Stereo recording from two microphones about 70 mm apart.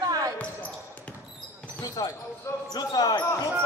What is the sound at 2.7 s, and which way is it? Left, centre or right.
Basketball bounce, left.